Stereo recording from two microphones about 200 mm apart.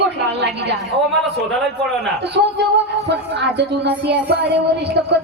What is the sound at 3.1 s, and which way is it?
Speech, 60° right (ahead or behind).